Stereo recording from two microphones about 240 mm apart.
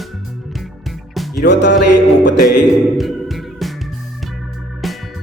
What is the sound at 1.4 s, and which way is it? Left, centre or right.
Music, left.